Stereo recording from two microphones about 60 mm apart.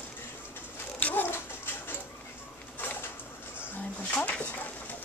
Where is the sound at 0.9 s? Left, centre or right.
Left.